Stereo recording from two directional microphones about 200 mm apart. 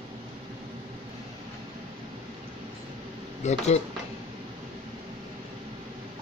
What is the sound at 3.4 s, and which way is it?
Speech, 35° left (ahead or behind).